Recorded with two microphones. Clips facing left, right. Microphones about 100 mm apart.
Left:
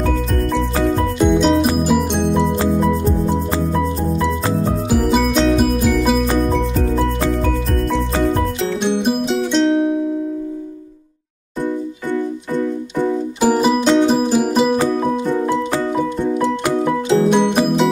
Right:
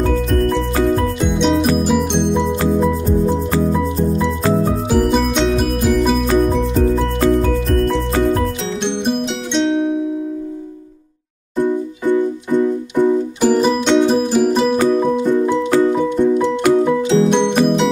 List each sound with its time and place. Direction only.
1.3 s music: centre (ahead or behind)
4.9 s music: centre (ahead or behind)
8.8 s music: 5° left (ahead or behind)
11.6 s music: 15° right (ahead or behind)
13.4 s music: 10° left (ahead or behind)
17.3 s music: 5° left (ahead or behind)